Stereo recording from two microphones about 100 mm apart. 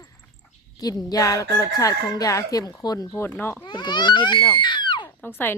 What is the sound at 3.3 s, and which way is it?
Speech, 20° left (ahead or behind).